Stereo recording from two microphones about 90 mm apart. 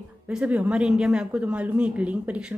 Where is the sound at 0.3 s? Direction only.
15° right (ahead or behind).